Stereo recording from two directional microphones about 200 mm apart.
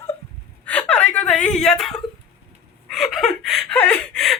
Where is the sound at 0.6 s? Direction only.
5° left (ahead or behind).